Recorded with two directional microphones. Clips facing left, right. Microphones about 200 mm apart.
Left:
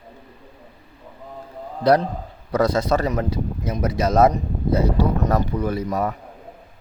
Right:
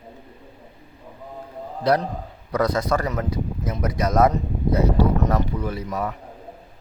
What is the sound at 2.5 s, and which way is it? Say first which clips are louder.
Speech: left 2 dB; 30° left (ahead or behind).